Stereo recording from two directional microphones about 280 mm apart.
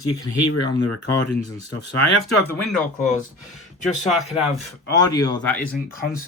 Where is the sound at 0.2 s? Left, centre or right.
Left.